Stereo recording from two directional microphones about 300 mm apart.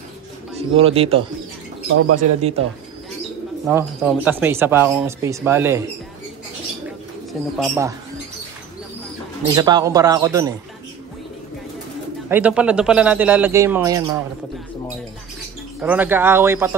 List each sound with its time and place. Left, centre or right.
0.6 s speech: centre
1.9 s speech: right
3.6 s speech: centre
7.5 s speech: centre
9.6 s speech: centre
12.3 s a man's voice: centre
15.8 s speech: centre